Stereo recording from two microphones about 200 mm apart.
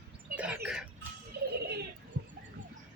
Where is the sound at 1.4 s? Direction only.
50° right (ahead or behind).